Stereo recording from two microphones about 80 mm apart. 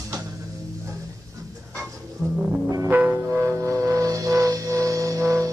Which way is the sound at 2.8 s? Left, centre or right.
Right.